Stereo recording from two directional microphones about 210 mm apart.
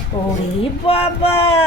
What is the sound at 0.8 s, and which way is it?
Speech, 25° left (ahead or behind).